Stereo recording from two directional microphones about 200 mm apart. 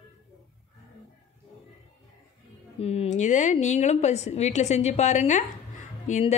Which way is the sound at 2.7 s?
30° left (ahead or behind).